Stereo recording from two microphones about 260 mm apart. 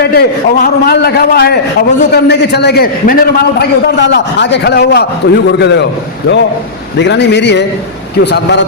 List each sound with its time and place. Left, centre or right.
0.0 s a man's voice: left